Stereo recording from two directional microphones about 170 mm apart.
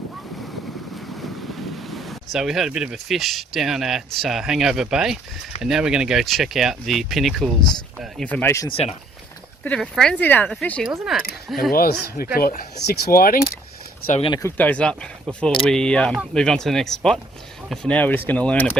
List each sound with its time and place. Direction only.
1.9 s speech: centre (ahead or behind)
8.7 s speech: 40° left (ahead or behind)
9.6 s speech: 5° left (ahead or behind)
11.7 s speech: 60° left (ahead or behind)
14.3 s speech: 20° left (ahead or behind)
14.6 s speech: 5° left (ahead or behind)